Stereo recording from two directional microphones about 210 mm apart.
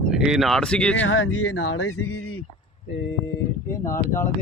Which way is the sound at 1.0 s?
70° left (ahead or behind).